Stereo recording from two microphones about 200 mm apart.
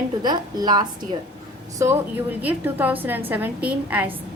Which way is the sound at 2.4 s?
10° right (ahead or behind).